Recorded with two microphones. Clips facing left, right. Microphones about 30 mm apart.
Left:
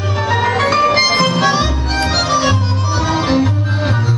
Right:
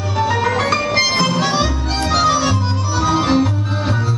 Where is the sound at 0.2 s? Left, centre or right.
Centre.